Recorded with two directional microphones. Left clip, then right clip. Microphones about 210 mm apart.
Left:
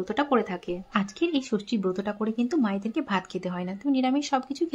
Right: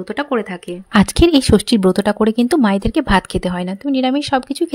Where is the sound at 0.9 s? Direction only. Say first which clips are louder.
Right 15 dB; 50° right (ahead or behind).